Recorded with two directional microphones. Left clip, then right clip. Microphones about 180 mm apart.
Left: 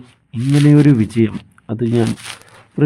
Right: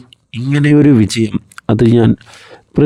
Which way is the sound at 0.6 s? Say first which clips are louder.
Right 4 dB; 50° right (ahead or behind).